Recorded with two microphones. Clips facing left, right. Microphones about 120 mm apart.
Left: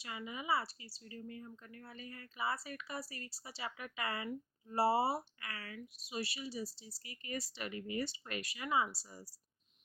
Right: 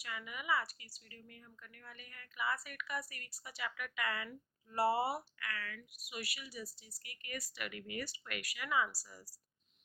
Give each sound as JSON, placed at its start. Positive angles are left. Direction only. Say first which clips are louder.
{"t": 0.0, "sound": "speech", "louder": "left 2 dB", "side_deg": 25}